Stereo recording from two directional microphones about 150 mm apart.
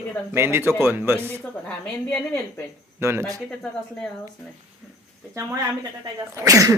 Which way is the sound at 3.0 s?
15° right (ahead or behind).